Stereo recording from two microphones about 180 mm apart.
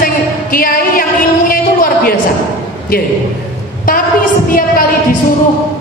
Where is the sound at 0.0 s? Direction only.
50° left (ahead or behind).